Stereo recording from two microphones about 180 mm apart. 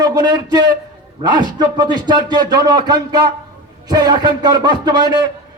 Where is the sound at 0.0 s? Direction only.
20° right (ahead or behind).